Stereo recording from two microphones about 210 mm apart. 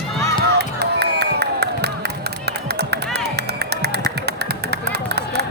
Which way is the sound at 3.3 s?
50° right (ahead or behind).